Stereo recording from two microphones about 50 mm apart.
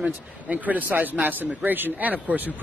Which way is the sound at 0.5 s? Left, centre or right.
Right.